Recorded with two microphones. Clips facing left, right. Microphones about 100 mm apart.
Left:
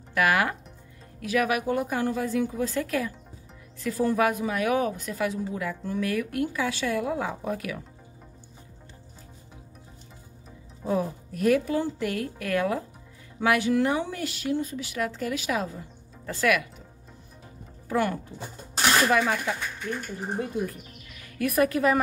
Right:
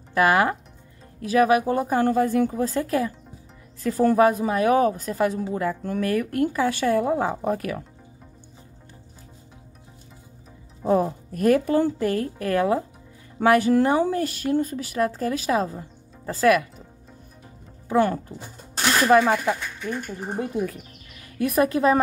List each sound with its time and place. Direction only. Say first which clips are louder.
0.1 s speech: right 5 dB; 30° right (ahead or behind)
2.0 s speech: right 6 dB; 50° right (ahead or behind); by 3.1 s 30° right (ahead or behind)
4.2 s speech: right 6 dB; 35° right (ahead or behind)
10.8 s speech: right 6 dB; 45° right (ahead or behind)
17.8 s speech: right 5 dB; 30° right (ahead or behind)
21.4 s a woman's voice: right 3 dB; 30° right (ahead or behind)